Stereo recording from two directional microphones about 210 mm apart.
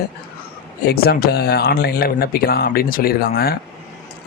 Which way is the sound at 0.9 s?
45° left (ahead or behind).